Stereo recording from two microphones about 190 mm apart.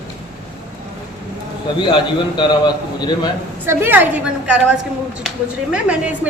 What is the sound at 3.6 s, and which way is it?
Speech, 10° right (ahead or behind).